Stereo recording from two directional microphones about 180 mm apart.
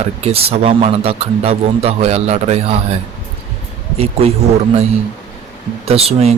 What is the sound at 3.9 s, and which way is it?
Speech, 35° right (ahead or behind).